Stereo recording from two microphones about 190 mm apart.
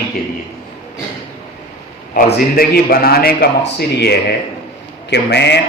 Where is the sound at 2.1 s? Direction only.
50° left (ahead or behind).